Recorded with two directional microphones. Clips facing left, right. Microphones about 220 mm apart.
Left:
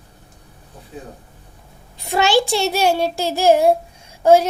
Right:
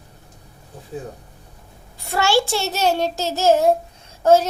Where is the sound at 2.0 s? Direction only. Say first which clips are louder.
Left 2 dB; 15° left (ahead or behind).